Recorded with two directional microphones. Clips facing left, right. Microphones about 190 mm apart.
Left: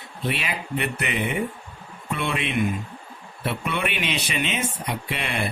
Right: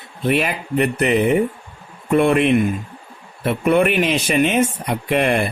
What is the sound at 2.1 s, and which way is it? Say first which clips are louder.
Speech: right 13 dB; 50° right (ahead or behind).